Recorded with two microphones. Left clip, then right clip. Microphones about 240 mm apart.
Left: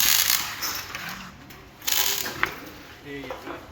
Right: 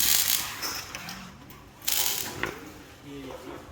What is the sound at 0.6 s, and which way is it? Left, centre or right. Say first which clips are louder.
Mechanisms: left 3 dB; centre.